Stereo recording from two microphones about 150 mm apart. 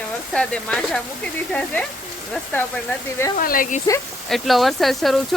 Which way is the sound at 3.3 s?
70° left (ahead or behind).